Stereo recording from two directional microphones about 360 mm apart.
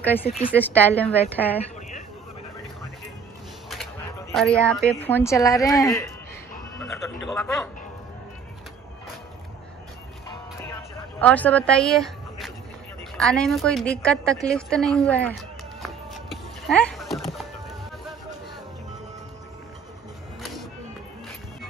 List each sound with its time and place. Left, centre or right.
0.0 s speech: centre
1.6 s a sound: centre
4.3 s speech: centre
7.3 s speech: centre
11.1 s speech: centre
14.5 s a sound: centre